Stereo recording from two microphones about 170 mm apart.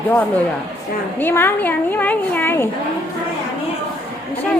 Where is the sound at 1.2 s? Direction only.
15° left (ahead or behind).